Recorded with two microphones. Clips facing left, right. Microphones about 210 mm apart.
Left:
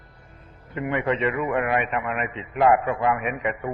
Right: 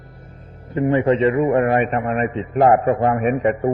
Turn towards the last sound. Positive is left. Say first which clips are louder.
# right 9 dB
turn(degrees=-40)  # may be behind; listen again after turning